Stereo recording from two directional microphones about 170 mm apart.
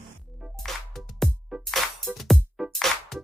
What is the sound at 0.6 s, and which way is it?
Music, centre (ahead or behind).